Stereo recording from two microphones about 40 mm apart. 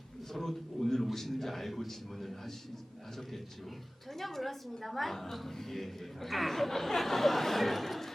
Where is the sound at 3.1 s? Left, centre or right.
Centre.